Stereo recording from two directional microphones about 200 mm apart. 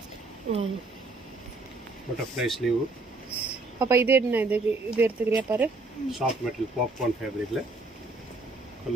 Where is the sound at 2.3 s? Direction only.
Centre (ahead or behind).